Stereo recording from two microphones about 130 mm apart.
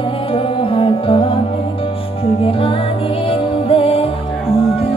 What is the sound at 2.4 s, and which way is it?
Music, 45° left (ahead or behind).